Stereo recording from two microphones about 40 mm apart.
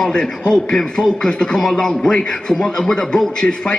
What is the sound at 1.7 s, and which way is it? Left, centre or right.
Beatboxing, centre.